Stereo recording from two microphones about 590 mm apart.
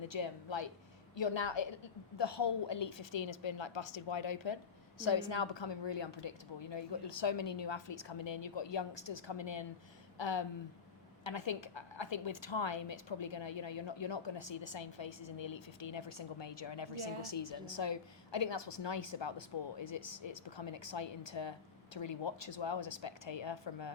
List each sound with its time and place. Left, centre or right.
0.1 s a woman's voice: left